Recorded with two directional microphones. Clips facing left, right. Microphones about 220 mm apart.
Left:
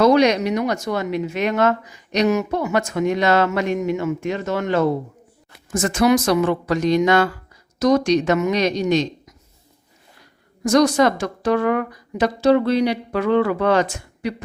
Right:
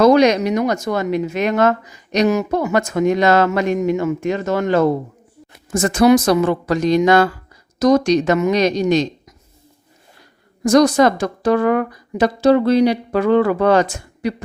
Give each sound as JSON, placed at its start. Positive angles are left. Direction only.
{"t": 0.0, "sound": "a woman's voice", "side_deg": -45}
{"t": 10.7, "sound": "a woman's voice", "side_deg": -40}